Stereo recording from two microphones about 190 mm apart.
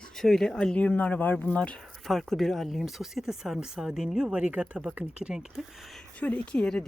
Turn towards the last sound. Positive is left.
turn(degrees=5)  # may be behind; listen again after turning